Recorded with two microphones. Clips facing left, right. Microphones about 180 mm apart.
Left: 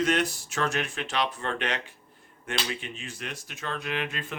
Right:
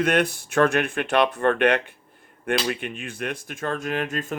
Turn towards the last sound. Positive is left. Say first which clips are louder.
# right 6 dB
turn(degrees=-45)  # may be behind; listen again after turning